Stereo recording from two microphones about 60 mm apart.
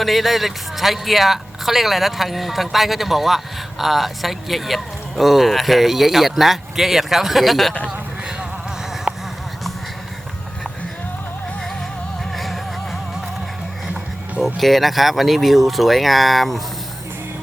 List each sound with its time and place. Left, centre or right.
0.0 s speech: centre
9.1 s a sound: centre
12.4 s music: centre
14.4 s speech: centre